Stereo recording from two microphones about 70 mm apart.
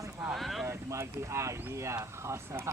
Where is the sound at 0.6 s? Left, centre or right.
Right.